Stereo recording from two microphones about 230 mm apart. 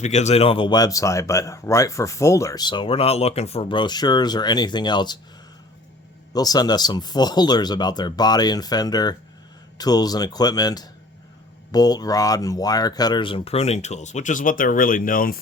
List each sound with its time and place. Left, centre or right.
0.0 s speech: left
6.3 s speech: centre; by 15.4 s left